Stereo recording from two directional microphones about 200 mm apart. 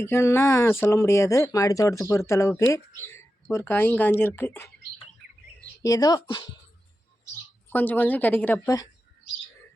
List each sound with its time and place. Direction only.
0.0 s speech: 10° left (ahead or behind)
5.8 s speech: 20° left (ahead or behind)
7.7 s speech: 10° left (ahead or behind)